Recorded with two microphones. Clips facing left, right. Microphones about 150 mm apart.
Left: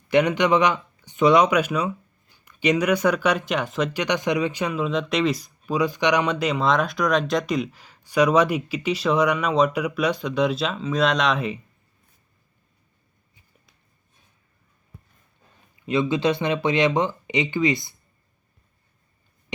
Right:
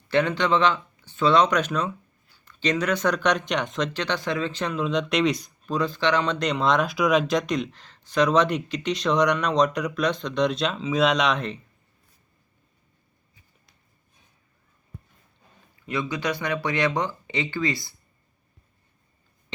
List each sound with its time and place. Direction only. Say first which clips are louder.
0.1 s speech: left 3 dB; 15° left (ahead or behind)
15.9 s speech: left 6 dB; 25° left (ahead or behind)